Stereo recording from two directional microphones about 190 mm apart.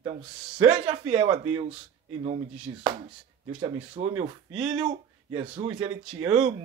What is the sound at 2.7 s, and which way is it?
Speech, 20° right (ahead or behind).